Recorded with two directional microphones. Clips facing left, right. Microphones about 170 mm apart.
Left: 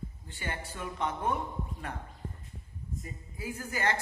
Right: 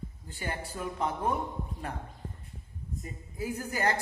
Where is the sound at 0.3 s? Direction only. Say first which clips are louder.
Right 3 dB; 40° right (ahead or behind).